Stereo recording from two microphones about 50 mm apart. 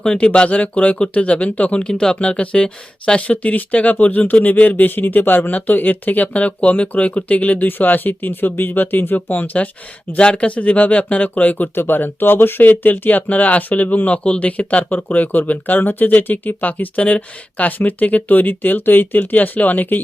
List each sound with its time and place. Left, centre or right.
0.0 s speech: centre
10.2 s speech: left